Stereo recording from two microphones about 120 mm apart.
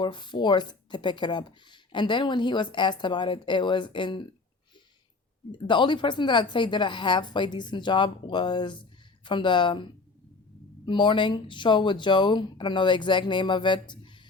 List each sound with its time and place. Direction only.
0.0 s speech: 40° left (ahead or behind)
5.5 s speech: 40° left (ahead or behind)